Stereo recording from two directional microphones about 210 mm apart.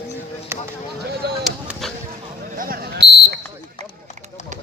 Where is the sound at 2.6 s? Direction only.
45° right (ahead or behind).